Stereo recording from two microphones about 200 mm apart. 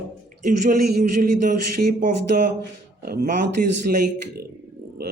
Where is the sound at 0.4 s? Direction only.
45° right (ahead or behind).